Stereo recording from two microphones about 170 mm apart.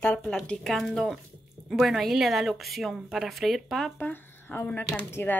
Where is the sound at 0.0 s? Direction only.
10° left (ahead or behind).